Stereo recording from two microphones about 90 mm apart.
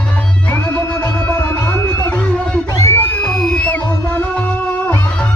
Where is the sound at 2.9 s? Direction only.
20° left (ahead or behind).